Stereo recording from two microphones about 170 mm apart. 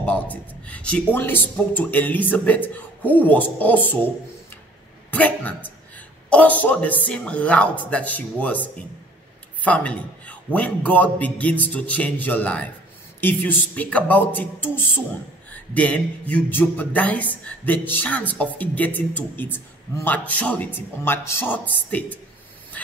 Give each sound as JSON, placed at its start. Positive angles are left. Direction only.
{"t": 0.0, "sound": "a man's voice", "side_deg": 10}
{"t": 5.1, "sound": "a man's voice", "side_deg": 10}